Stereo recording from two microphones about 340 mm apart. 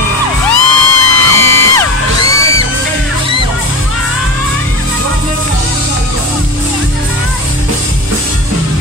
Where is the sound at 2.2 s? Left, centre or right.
Right.